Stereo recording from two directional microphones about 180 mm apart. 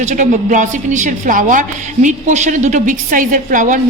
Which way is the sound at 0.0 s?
45° right (ahead or behind).